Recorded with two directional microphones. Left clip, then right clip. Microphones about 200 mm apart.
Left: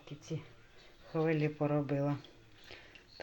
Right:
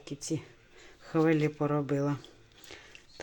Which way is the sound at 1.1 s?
40° right (ahead or behind).